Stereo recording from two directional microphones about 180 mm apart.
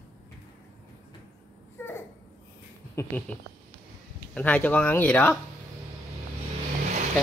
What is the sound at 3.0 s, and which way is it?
Speech, 10° left (ahead or behind).